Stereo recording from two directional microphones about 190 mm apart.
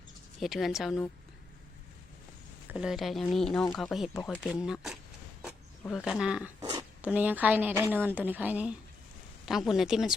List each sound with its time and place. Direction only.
0.3 s speech: centre (ahead or behind)
2.6 s speech: 5° right (ahead or behind)
6.6 s a sound: 20° right (ahead or behind)
7.0 s a woman's voice: 10° right (ahead or behind)